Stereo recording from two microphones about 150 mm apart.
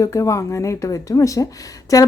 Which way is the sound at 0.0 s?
20° left (ahead or behind).